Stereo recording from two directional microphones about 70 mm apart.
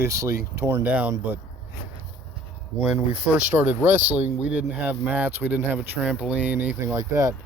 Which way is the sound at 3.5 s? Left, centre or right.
Right.